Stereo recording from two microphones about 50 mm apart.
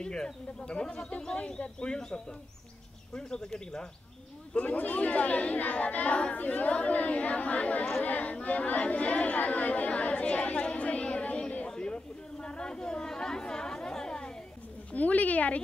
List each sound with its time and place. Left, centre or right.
0.0 s speech: centre
4.6 s speech: left
8.0 s chatter: left
14.9 s speech: left